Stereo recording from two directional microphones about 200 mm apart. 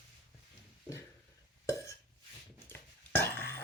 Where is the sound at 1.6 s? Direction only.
15° left (ahead or behind).